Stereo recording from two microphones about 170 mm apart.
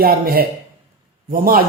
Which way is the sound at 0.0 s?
60° right (ahead or behind).